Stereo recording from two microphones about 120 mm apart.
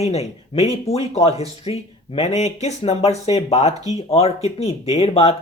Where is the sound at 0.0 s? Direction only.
65° left (ahead or behind).